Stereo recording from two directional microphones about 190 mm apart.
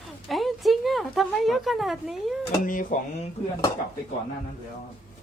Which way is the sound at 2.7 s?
45° left (ahead or behind).